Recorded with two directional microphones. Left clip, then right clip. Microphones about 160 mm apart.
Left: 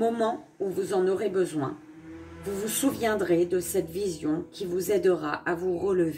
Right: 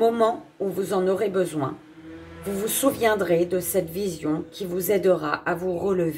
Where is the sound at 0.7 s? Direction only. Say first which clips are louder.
Right 3 dB; 15° left (ahead or behind).